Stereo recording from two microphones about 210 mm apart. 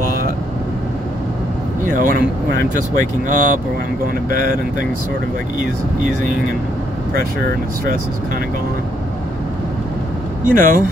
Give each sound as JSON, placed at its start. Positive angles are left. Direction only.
{"t": 1.9, "sound": "speech", "side_deg": -40}
{"t": 10.4, "sound": "speech", "side_deg": -40}